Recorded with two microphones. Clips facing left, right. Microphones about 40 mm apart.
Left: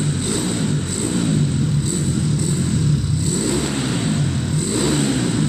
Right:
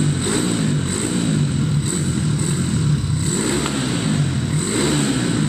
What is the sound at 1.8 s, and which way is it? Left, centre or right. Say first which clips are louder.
Vehicle: left 1 dB; right.